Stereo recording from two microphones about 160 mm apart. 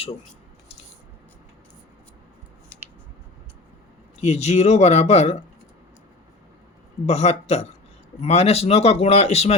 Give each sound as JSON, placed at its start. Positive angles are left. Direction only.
{"t": 4.2, "sound": "speech", "side_deg": 45}
{"t": 7.0, "sound": "speech", "side_deg": 40}